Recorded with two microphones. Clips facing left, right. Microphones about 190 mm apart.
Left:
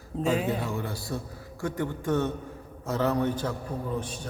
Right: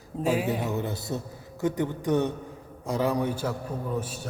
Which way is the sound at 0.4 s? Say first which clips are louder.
Right 2 dB; 20° right (ahead or behind).